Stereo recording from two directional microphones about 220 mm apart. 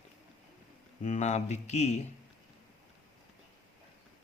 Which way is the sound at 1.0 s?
30° left (ahead or behind).